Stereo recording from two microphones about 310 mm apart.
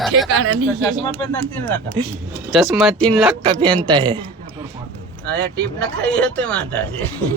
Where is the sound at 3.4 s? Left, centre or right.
Centre.